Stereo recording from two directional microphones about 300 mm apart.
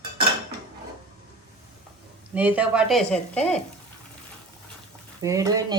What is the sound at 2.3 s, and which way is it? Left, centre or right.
Speech, centre.